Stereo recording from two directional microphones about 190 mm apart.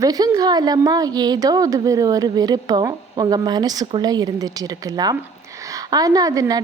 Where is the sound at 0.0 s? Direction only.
20° right (ahead or behind).